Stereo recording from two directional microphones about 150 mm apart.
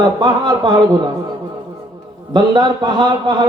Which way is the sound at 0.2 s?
25° right (ahead or behind).